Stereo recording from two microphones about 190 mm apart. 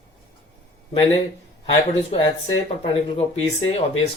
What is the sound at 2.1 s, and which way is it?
Speech, 30° left (ahead or behind).